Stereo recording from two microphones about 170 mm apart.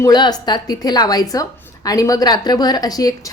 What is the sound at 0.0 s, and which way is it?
A woman's voice, 25° left (ahead or behind).